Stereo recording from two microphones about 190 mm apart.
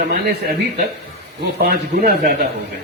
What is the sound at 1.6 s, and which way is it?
Speech, 55° right (ahead or behind).